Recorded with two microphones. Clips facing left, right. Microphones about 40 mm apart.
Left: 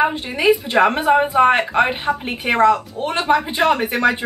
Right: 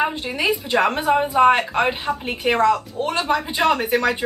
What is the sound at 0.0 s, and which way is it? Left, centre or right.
Speech, centre.